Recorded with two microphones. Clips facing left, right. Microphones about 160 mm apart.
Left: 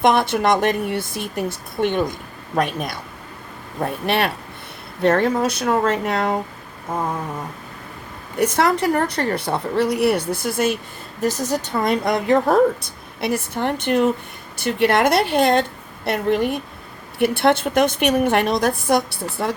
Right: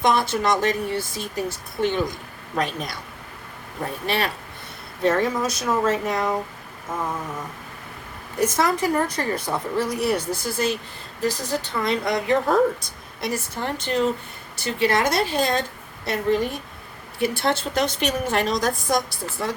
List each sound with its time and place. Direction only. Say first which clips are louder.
0.0 s speech: left 4 dB; 60° left (ahead or behind)
4.0 s speech: left 4 dB; 60° left (ahead or behind)
8.4 s speech: left 3 dB; 65° left (ahead or behind)